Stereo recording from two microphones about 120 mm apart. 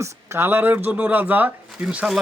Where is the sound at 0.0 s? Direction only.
20° right (ahead or behind).